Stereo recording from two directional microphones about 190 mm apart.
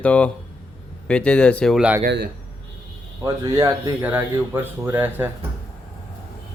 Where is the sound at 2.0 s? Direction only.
50° right (ahead or behind).